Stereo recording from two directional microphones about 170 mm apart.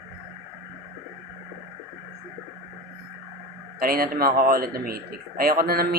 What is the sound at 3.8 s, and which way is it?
Speech, 60° right (ahead or behind).